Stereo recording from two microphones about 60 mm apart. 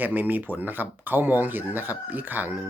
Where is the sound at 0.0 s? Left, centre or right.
Right.